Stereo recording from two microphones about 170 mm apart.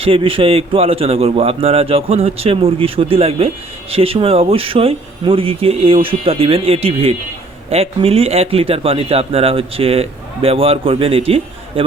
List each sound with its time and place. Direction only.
0.0 s a man's voice: 30° right (ahead or behind)